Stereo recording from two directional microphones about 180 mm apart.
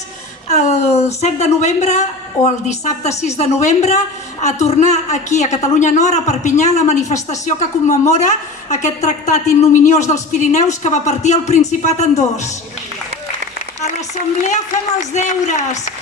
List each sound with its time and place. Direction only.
0.4 s a woman's voice: 40° left (ahead or behind)
15.1 s a woman's voice: 40° left (ahead or behind)